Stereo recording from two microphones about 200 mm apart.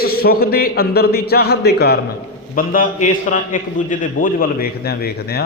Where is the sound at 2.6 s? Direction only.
45° left (ahead or behind).